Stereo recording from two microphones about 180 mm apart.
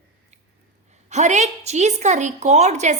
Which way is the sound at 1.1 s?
40° right (ahead or behind).